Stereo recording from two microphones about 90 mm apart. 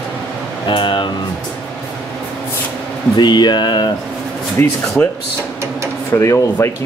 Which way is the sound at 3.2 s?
55° left (ahead or behind).